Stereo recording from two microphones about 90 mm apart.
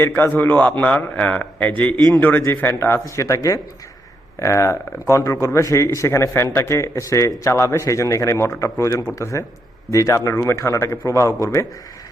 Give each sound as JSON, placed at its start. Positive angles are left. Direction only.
{"t": 0.0, "sound": "a man's voice", "side_deg": 25}